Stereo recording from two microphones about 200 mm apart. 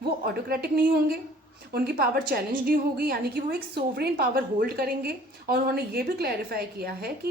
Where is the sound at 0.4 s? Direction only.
50° right (ahead or behind).